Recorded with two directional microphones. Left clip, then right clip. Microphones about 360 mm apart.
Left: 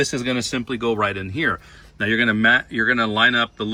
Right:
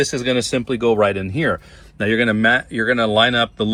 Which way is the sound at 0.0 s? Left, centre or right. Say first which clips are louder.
Right 4 dB; centre.